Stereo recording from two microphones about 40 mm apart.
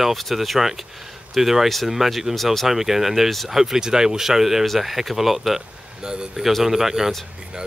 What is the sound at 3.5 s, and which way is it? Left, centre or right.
Speech, centre.